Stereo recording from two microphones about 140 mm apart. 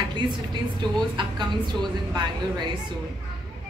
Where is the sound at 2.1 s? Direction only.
30° right (ahead or behind).